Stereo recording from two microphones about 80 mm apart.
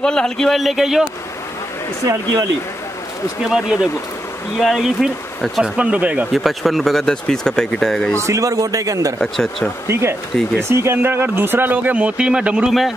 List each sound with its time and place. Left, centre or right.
0.0 s speech: centre
3.4 s speech: centre
5.6 s speech: centre
6.3 s speech: centre
8.2 s a man's voice: right
9.2 s speech: centre
9.8 s speech: right; by 12.7 s centre